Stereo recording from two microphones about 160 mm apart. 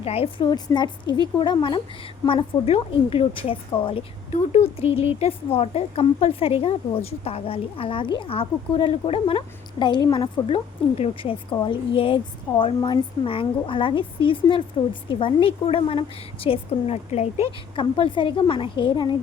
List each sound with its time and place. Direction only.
0.0 s speech: 40° left (ahead or behind)
0.4 s a woman's voice: 25° left (ahead or behind)
4.3 s speech: 45° left (ahead or behind)